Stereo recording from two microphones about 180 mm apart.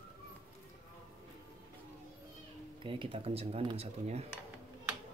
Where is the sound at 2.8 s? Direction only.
30° right (ahead or behind).